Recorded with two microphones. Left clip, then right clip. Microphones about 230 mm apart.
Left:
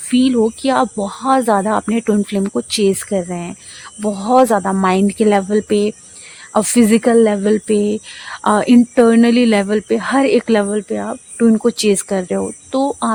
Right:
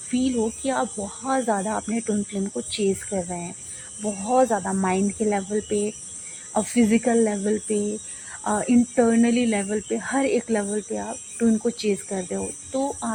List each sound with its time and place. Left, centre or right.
0.1 s speech: left